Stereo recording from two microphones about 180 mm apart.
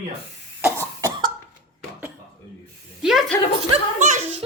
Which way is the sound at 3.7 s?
45° right (ahead or behind).